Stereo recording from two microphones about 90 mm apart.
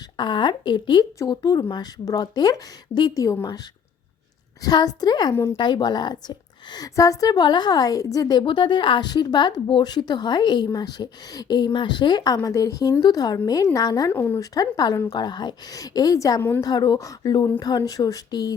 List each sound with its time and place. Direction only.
0.2 s a woman's voice: 60° left (ahead or behind)
4.6 s a woman's voice: 45° left (ahead or behind)
14.1 s speech: 25° left (ahead or behind)
14.3 s a woman's voice: 45° left (ahead or behind)